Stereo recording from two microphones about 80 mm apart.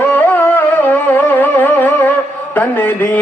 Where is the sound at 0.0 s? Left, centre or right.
Left.